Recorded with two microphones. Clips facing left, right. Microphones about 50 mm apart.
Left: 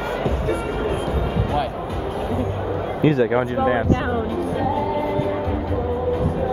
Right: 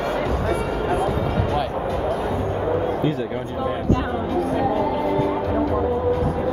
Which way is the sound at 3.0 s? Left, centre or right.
Left.